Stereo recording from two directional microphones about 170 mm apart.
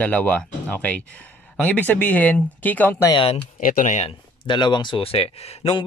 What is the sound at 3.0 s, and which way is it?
Speech, 30° left (ahead or behind).